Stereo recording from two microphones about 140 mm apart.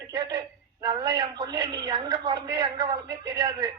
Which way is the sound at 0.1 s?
30° right (ahead or behind).